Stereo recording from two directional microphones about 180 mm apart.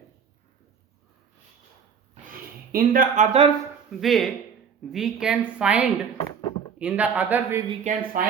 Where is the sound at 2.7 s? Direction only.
50° right (ahead or behind).